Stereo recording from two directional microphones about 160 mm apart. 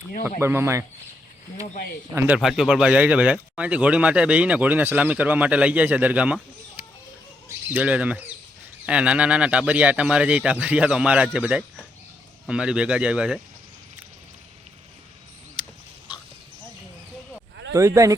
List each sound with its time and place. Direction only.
0.3 s speech: 15° right (ahead or behind)
2.1 s speech: 10° right (ahead or behind)
17.7 s speech: 20° right (ahead or behind)